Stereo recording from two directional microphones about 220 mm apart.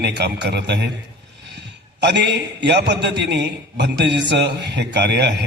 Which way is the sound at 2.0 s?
50° right (ahead or behind).